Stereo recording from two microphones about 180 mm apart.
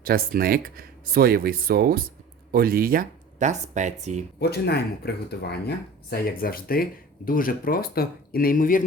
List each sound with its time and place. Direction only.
0.0 s speech: 55° right (ahead or behind); by 4.3 s 40° right (ahead or behind)
4.4 s speech: 65° left (ahead or behind); by 8.8 s 50° left (ahead or behind)